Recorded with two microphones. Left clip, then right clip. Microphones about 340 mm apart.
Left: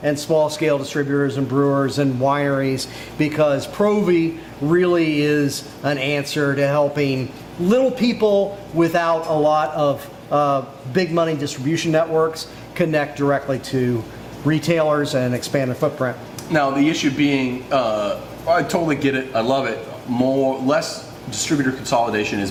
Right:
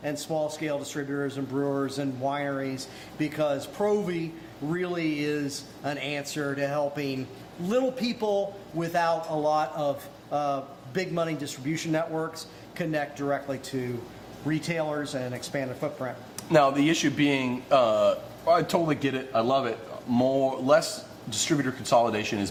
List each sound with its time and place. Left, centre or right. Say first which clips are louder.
0.0 s a man's voice: left 12 dB; left
16.5 s speech: left 3 dB; right